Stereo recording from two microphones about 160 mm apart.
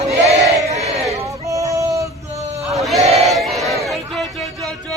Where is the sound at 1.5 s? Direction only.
20° right (ahead or behind).